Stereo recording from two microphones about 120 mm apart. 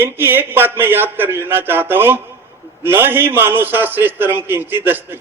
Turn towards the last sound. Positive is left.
turn(degrees=-15)  # may be behind; listen again after turning